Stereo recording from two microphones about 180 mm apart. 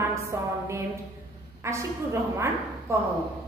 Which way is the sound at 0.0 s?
15° right (ahead or behind).